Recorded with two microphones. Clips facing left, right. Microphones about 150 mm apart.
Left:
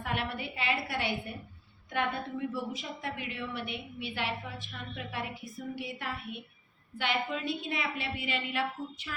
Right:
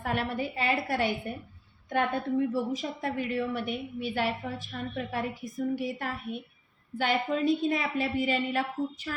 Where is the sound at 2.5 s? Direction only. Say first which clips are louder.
Right 6 dB; 40° right (ahead or behind).